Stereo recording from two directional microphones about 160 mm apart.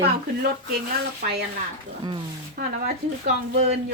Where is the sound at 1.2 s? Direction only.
65° right (ahead or behind).